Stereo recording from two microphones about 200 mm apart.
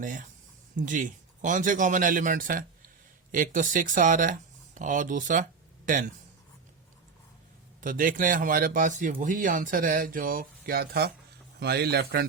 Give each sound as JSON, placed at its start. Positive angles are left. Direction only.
{"t": 0.0, "sound": "a man's voice", "side_deg": -40}
{"t": 7.8, "sound": "a man's voice", "side_deg": -45}